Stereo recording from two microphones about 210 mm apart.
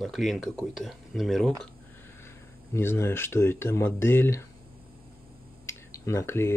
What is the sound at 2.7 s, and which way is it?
Speech, 10° left (ahead or behind).